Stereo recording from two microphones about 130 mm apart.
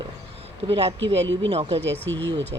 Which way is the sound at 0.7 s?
45° right (ahead or behind).